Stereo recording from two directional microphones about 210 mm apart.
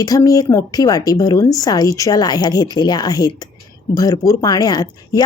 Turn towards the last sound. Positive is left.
turn(degrees=20)  # may be behind; listen again after turning